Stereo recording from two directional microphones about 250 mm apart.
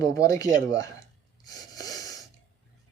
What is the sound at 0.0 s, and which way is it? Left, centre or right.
Speech, centre.